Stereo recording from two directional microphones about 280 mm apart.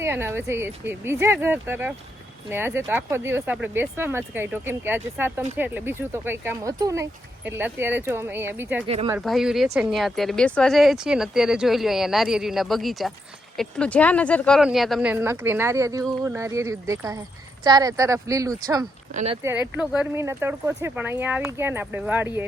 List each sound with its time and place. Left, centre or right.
0.0 s speech: centre
8.9 s speech: right
9.1 s speech: centre; by 19.4 s right
19.4 s speech: centre